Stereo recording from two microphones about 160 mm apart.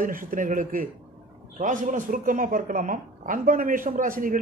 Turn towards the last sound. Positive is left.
turn(degrees=-60)  # may be behind; listen again after turning